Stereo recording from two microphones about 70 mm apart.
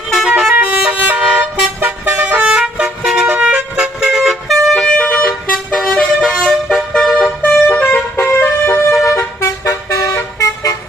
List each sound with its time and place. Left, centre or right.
0.3 s vehicle: centre
3.4 s vehicle horn: centre
4.7 s vehicle horn: centre
4.9 s vehicle: left
5.7 s vehicle: centre
7.4 s vehicle horn: left
8.3 s vehicle: left